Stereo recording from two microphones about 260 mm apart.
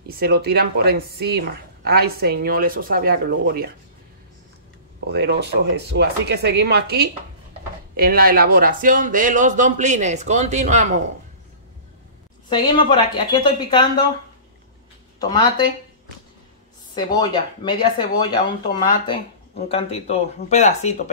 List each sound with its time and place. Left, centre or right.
0.1 s a woman's voice: right
5.0 s a woman's voice: right
12.4 s speech: centre
15.1 s speech: centre
16.9 s speech: centre